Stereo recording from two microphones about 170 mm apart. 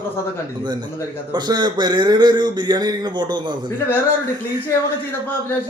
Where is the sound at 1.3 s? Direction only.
25° right (ahead or behind).